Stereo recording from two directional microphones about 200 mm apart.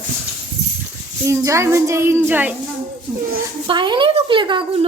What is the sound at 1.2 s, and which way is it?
A child's voice, 15° right (ahead or behind).